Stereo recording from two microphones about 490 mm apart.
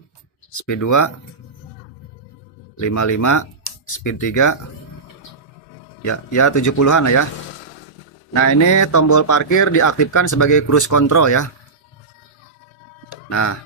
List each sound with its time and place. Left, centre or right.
0.5 s speech: left
2.8 s speech: left
6.0 s speech: left
8.4 s speech: left
13.3 s speech: left